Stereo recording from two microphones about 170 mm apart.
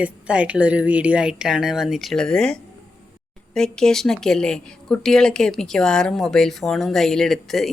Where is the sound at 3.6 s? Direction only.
5° left (ahead or behind).